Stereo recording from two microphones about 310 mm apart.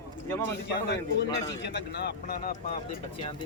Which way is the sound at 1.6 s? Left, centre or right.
Left.